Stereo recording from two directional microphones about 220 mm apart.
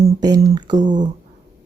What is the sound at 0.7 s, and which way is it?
Speech, 35° right (ahead or behind).